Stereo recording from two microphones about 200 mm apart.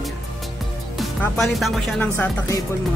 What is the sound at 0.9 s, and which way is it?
Speech, centre (ahead or behind).